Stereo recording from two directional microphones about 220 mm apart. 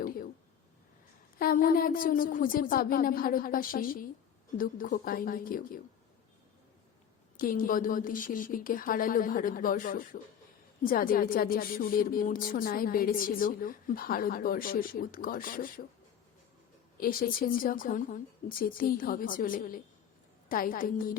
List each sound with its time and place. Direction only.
0.0 s a sound: 40° left (ahead or behind)
1.4 s a woman's voice: 40° left (ahead or behind)
7.3 s a woman's voice: 40° left (ahead or behind)
17.0 s a woman's voice: 40° left (ahead or behind)